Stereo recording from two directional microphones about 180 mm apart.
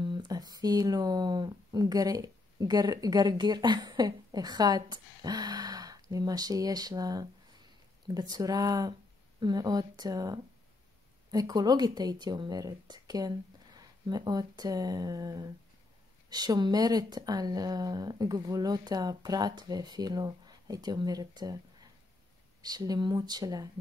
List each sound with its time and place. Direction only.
0.0 s speech: 25° right (ahead or behind)